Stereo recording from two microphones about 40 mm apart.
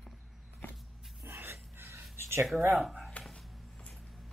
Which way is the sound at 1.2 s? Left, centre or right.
Right.